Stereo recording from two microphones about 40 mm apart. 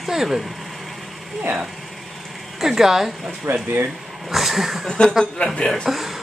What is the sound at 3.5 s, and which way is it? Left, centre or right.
Speech, right.